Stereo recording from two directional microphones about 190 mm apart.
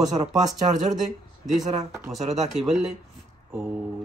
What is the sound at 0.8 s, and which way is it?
Speech, 40° right (ahead or behind).